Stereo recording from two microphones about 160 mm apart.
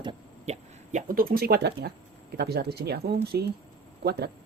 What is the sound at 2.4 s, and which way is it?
Speech, 90° right.